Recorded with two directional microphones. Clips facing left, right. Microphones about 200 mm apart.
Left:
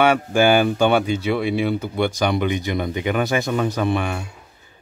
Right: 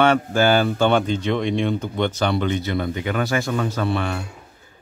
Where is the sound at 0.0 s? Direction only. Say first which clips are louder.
Left 1 dB; 10° left (ahead or behind).